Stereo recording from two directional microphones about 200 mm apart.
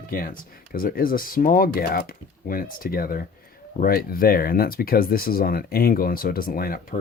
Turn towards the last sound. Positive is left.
turn(degrees=45)  # may be behind; listen again after turning